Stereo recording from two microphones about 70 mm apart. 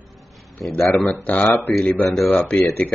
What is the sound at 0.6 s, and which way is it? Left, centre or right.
Speech, centre.